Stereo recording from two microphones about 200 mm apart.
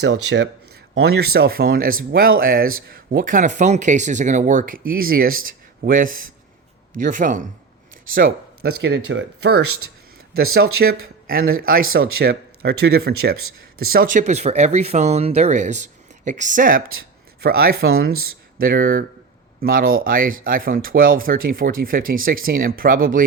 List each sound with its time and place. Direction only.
0.0 s speech: 60° right (ahead or behind)
8.8 s speech: 75° right (ahead or behind)
10.5 s speech: 50° right (ahead or behind)